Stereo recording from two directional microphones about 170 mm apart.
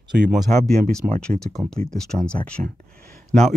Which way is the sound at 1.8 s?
5° left (ahead or behind).